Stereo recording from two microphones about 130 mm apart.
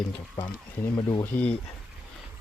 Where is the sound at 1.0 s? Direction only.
35° left (ahead or behind).